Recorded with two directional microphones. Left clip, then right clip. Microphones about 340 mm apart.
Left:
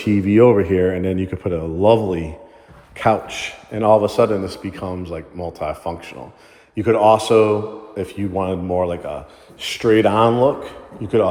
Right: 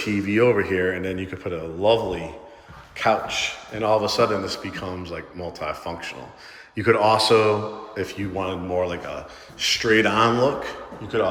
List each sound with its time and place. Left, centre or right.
0.0 s a man's voice: centre